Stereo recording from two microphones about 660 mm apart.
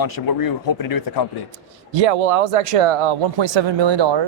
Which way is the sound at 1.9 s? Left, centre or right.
Right.